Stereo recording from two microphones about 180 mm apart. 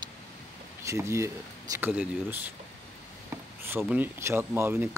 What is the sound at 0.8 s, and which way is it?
Speech, 15° right (ahead or behind).